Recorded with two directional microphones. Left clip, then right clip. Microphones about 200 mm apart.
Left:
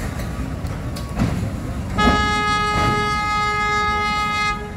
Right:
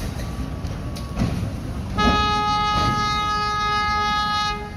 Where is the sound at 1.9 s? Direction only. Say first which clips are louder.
Left 2 dB; 25° left (ahead or behind).